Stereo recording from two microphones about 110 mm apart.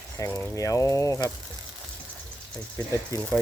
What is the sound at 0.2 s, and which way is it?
Speech, 25° left (ahead or behind).